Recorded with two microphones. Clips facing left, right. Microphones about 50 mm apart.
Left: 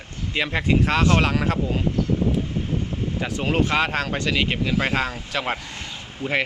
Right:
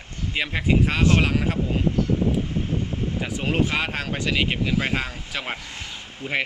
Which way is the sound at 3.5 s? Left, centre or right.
Centre.